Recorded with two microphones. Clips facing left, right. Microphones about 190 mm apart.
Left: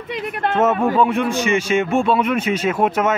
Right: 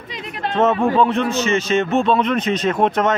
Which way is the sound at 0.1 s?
60° left (ahead or behind).